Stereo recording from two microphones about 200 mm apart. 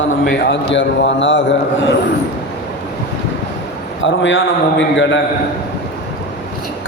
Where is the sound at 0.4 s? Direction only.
65° left (ahead or behind).